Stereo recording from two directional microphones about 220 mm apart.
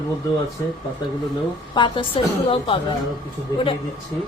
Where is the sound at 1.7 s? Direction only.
20° left (ahead or behind).